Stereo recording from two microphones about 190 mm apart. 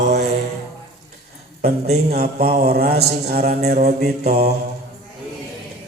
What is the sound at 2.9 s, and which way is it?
Speech, 55° right (ahead or behind).